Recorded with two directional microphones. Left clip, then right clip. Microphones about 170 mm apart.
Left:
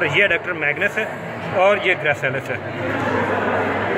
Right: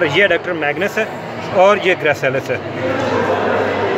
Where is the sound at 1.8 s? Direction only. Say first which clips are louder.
Right 4 dB; 50° right (ahead or behind).